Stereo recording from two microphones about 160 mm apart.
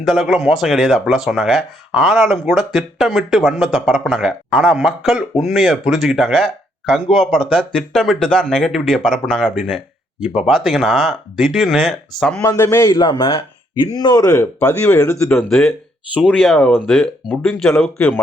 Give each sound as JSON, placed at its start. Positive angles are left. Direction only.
{"t": 0.0, "sound": "speech", "side_deg": 0}
{"t": 12.4, "sound": "speech", "side_deg": 20}